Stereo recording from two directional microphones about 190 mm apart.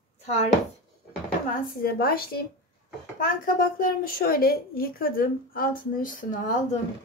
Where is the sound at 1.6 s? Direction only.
50° left (ahead or behind).